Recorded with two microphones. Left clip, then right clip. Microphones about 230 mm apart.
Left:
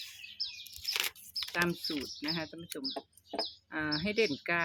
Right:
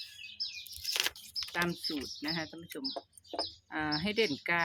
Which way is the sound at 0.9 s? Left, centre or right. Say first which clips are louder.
Right 2 dB; left.